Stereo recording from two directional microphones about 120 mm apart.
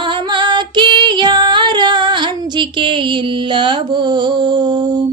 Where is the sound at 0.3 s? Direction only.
40° right (ahead or behind).